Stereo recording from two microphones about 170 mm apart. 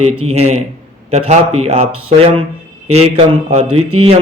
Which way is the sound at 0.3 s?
40° right (ahead or behind).